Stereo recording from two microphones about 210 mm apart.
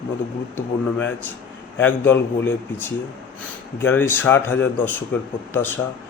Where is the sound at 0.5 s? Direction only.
10° left (ahead or behind).